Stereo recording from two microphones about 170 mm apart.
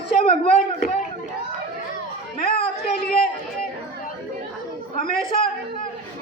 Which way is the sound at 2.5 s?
65° left (ahead or behind).